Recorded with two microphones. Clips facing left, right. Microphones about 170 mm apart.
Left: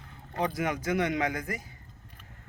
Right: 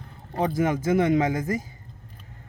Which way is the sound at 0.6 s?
30° right (ahead or behind).